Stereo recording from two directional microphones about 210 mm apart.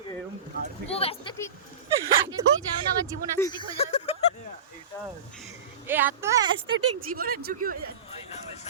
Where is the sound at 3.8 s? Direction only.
30° left (ahead or behind).